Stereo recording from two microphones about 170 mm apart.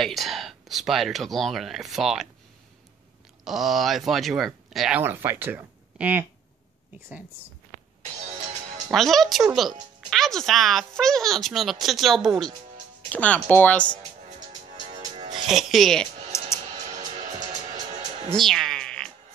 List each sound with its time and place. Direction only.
0.0 s speech: centre (ahead or behind)
3.4 s speech: centre (ahead or behind)
8.9 s speech: centre (ahead or behind)
14.2 s music: 45° right (ahead or behind)
15.4 s speech: centre (ahead or behind)
16.3 s music: 15° left (ahead or behind)
16.9 s music: 45° right (ahead or behind)
17.4 s music: 20° right (ahead or behind)
18.3 s music: centre (ahead or behind)